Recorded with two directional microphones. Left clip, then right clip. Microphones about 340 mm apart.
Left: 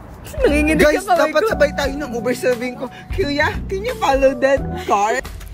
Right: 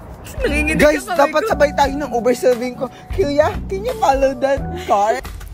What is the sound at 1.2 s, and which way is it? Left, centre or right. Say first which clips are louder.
Speech: right 1 dB; right.